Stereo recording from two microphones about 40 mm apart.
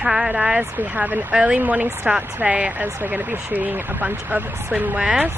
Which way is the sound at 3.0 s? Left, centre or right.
Right.